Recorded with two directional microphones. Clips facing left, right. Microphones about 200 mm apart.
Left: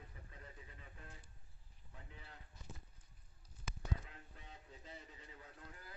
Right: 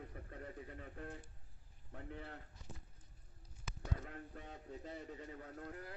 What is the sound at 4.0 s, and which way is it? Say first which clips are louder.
A man's voice: right 8 dB; 50° right (ahead or behind).